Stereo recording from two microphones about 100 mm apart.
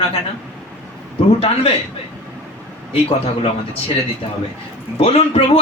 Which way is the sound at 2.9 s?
80° left.